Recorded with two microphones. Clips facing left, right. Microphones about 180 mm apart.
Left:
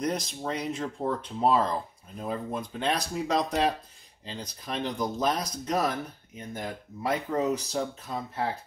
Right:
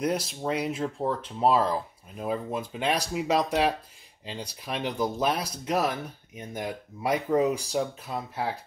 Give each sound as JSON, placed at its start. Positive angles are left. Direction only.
{"t": 0.0, "sound": "speech", "side_deg": -5}